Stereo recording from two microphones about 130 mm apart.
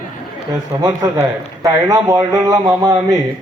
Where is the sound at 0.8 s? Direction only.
25° right (ahead or behind).